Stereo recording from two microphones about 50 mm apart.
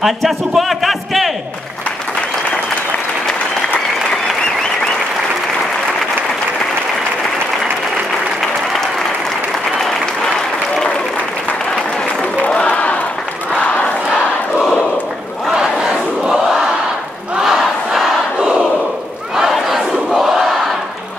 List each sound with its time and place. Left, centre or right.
0.0 s a man's voice: centre
12.4 s crowd: left
15.5 s battle cry: centre
17.4 s crowd: centre
19.3 s battle cry: centre
20.2 s crowd: centre